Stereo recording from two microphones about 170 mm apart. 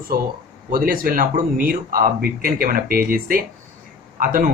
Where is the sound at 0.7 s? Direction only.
55° right (ahead or behind).